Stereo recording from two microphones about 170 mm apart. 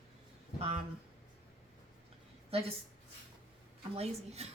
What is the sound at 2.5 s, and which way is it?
Speech, 35° right (ahead or behind).